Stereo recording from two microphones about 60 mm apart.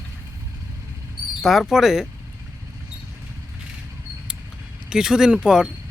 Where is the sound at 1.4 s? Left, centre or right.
Centre.